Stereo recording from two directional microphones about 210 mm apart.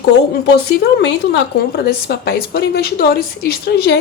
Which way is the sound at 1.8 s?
45° left (ahead or behind).